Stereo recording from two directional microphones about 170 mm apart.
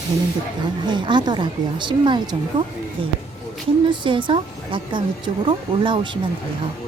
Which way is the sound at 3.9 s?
30° right (ahead or behind).